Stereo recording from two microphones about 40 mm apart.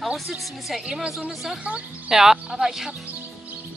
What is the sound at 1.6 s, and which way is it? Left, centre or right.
Speech, right.